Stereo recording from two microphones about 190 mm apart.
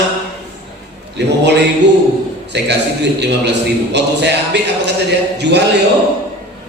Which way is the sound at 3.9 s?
65° right (ahead or behind).